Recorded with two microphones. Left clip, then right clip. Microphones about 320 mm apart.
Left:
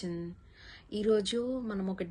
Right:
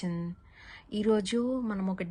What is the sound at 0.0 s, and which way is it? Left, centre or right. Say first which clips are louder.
Speech: right 1 dB; centre.